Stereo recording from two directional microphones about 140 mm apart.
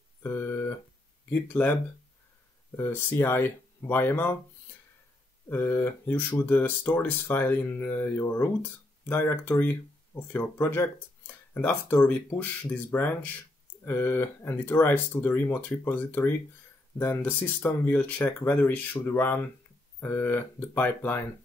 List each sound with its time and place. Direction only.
0.2 s a sound: 15° left (ahead or behind)
1.3 s speech: 10° left (ahead or behind)
5.5 s speech: 15° left (ahead or behind)